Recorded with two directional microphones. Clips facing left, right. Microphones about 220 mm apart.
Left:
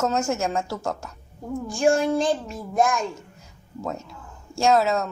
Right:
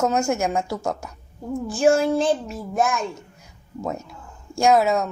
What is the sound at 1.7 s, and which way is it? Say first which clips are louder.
A child's voice: right 2 dB; 5° right (ahead or behind).